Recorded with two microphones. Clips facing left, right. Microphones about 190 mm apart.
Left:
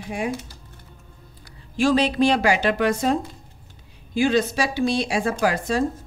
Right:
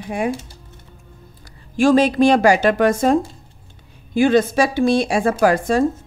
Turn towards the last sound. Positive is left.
turn(degrees=-50)  # may be behind; listen again after turning